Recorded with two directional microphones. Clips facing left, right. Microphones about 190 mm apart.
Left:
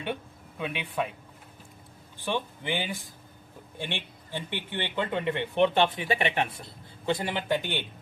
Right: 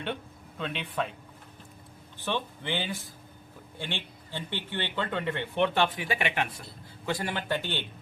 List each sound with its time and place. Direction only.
0.6 s speech: 10° left (ahead or behind)
2.1 s speech: 15° left (ahead or behind)